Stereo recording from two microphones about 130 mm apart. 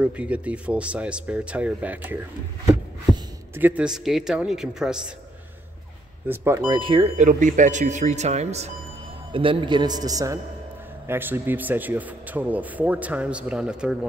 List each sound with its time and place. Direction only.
0.0 s speech: 10° right (ahead or behind)
3.5 s a man's voice: 15° right (ahead or behind)
6.2 s speech: 15° right (ahead or behind)
6.7 s a man's voice: 40° right (ahead or behind)
7.2 s speech: 75° right (ahead or behind); by 8.7 s 60° right (ahead or behind)
9.3 s a man's voice: 45° right (ahead or behind); by 13.9 s 5° right (ahead or behind)